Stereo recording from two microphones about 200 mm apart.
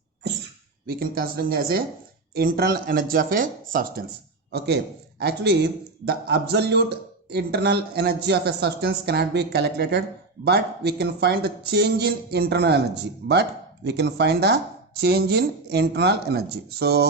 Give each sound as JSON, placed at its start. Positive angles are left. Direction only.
{"t": 0.9, "sound": "speech", "side_deg": -50}
{"t": 4.5, "sound": "speech", "side_deg": -55}